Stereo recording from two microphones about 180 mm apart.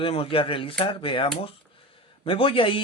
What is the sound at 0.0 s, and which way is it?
Speech, 30° left (ahead or behind).